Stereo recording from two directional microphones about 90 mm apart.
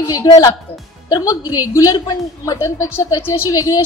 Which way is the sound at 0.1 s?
45° left (ahead or behind).